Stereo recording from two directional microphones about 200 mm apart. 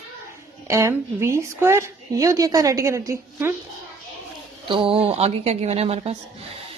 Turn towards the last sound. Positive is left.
turn(degrees=-30)  # may be behind; listen again after turning